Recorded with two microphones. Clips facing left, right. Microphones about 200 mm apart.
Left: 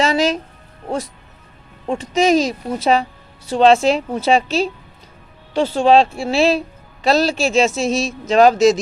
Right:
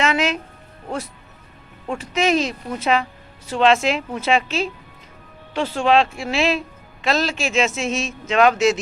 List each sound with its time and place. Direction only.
0.0 s speech: 35° left (ahead or behind)
1.9 s speech: 30° left (ahead or behind)